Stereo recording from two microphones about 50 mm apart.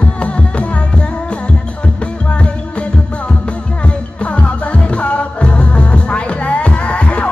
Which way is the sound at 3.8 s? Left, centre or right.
Left.